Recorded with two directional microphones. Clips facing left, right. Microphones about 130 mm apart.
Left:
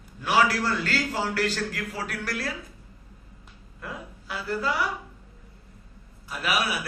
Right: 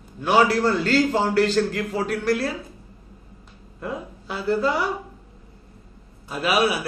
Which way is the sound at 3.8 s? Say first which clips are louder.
Right 7 dB; 25° right (ahead or behind).